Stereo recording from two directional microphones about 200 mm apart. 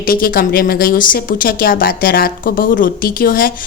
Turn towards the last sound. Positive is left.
turn(degrees=45)  # may be behind; listen again after turning